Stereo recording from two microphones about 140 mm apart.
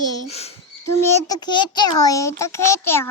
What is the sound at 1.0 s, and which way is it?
A child's voice, 30° left (ahead or behind).